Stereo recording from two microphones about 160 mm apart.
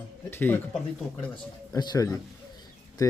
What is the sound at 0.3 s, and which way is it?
Speech, 10° left (ahead or behind).